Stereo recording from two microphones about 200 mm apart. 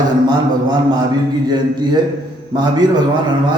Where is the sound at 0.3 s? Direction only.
20° right (ahead or behind).